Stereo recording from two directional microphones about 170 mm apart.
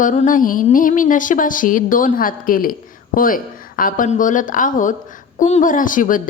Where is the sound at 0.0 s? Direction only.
50° left (ahead or behind).